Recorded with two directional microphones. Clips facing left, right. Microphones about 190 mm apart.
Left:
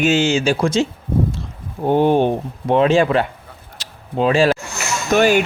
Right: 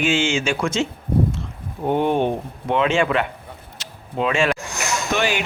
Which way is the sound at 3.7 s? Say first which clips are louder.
Left 4 dB; 35° left (ahead or behind).